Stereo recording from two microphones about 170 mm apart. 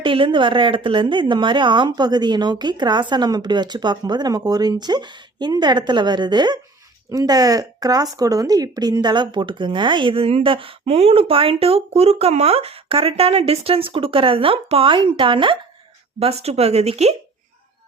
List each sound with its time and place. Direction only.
0.0 s speech: 30° right (ahead or behind)